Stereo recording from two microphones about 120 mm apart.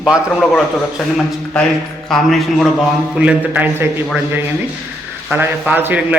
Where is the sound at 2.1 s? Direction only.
Centre (ahead or behind).